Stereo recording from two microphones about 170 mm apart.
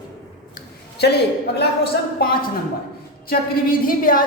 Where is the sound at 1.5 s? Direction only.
70° left (ahead or behind).